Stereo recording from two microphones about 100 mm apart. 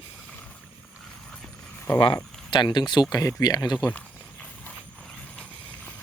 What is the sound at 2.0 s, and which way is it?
Speech, 55° left (ahead or behind).